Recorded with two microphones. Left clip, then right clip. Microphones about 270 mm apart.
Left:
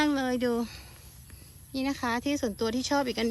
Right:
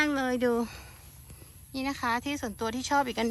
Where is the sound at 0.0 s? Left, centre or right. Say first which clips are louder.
Even; centre.